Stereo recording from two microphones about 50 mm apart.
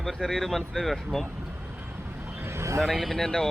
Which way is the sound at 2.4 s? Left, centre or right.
Right.